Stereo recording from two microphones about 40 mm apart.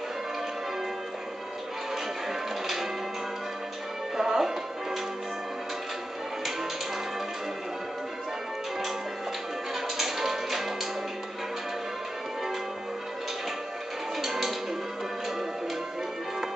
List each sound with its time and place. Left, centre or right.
2.6 s church bell: centre
4.2 s music: centre
9.9 s music: centre
14.2 s music: centre